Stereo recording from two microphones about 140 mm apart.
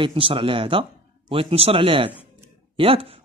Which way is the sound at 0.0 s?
40° right (ahead or behind).